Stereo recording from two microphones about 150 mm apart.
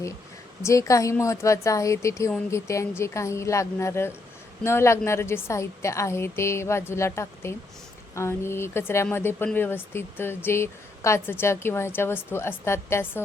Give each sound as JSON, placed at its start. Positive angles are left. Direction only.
{"t": 0.6, "sound": "speech", "side_deg": 20}